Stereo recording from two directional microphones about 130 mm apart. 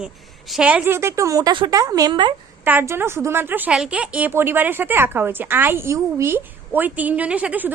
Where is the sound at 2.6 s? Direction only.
15° right (ahead or behind).